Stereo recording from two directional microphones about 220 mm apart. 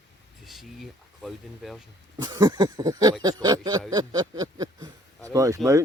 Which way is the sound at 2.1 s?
20° right (ahead or behind).